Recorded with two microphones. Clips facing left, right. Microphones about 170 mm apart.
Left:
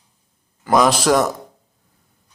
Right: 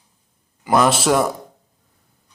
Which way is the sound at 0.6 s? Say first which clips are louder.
Left 1 dB; 5° right (ahead or behind).